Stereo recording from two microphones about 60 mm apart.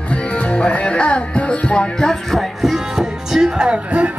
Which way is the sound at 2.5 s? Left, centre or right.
Centre.